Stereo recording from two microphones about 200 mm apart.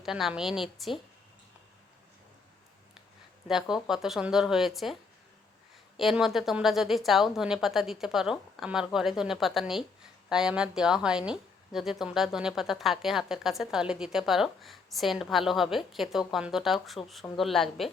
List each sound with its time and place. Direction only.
0.0 s speech: centre (ahead or behind)
3.4 s speech: centre (ahead or behind)
6.0 s speech: centre (ahead or behind)